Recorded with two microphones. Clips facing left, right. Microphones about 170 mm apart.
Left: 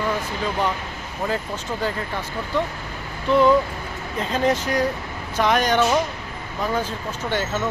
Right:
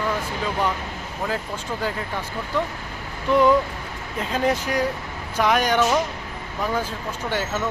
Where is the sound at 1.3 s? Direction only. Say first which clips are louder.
Left 2 dB; 10° right (ahead or behind).